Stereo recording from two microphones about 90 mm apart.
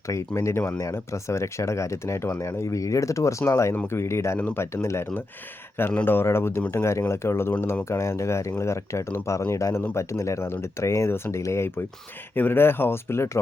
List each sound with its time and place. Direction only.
0.1 s speech: 35° left (ahead or behind)
4.4 s speech: 20° left (ahead or behind)
4.6 s speech: 30° left (ahead or behind)